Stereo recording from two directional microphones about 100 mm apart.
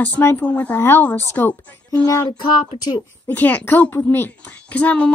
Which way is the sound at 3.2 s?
15° left (ahead or behind).